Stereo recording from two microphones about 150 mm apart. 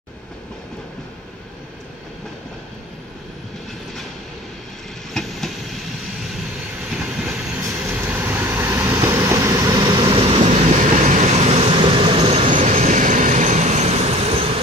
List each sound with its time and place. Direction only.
6.9 s vehicle: 5° right (ahead or behind); by 12.5 s 40° right (ahead or behind)
12.5 s train: 55° right (ahead or behind); by 14.6 s 40° right (ahead or behind)